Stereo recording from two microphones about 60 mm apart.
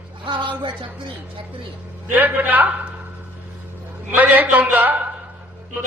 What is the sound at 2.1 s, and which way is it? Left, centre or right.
Speech, right.